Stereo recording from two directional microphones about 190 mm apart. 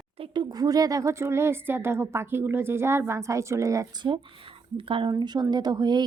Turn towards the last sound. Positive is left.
turn(degrees=-20)  # may be behind; listen again after turning